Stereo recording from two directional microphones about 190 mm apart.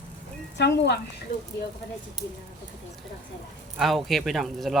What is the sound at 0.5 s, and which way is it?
Speech, 65° left (ahead or behind).